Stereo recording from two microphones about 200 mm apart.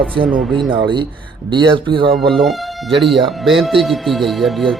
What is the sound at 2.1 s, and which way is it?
Speech, centre (ahead or behind).